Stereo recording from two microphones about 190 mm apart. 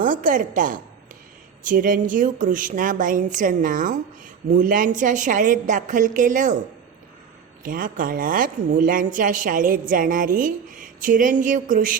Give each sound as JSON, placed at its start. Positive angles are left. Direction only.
{"t": 0.0, "sound": "a woman's voice", "side_deg": -45}
{"t": 7.6, "sound": "a woman's voice", "side_deg": -45}